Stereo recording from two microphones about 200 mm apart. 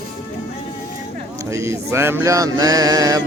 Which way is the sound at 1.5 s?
15° right (ahead or behind).